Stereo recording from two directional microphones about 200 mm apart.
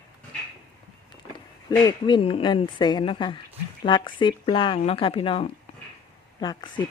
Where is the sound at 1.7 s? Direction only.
20° left (ahead or behind).